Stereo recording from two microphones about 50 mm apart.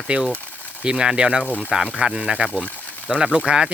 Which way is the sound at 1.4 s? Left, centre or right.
Left.